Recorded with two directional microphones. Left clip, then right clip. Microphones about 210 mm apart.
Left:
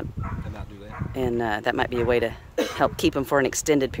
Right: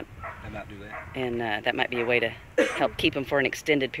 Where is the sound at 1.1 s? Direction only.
40° left (ahead or behind).